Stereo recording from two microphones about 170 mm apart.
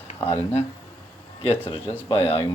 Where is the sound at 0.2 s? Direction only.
15° left (ahead or behind).